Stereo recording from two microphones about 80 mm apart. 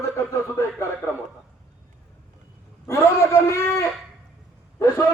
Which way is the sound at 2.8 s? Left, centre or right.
Left.